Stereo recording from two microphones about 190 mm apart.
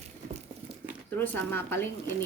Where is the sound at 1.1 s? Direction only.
10° left (ahead or behind).